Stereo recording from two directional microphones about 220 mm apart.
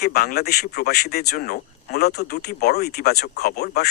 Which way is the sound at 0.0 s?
45° left (ahead or behind).